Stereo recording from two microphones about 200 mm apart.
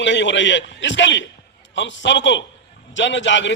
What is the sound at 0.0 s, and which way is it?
A man's voice, 65° left (ahead or behind).